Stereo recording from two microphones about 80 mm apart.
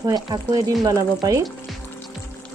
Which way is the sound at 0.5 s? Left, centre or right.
Right.